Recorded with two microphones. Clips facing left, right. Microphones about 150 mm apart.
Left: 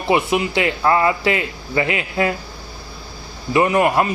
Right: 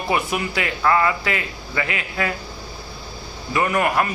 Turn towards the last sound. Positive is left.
turn(degrees=25)  # may be behind; listen again after turning